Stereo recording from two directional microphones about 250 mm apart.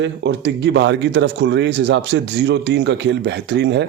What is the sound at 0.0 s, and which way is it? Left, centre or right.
Speech, right.